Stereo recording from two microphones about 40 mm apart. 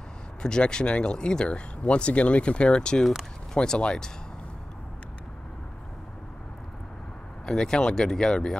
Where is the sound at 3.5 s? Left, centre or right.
Left.